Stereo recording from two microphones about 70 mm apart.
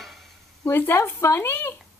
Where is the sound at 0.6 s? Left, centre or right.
Left.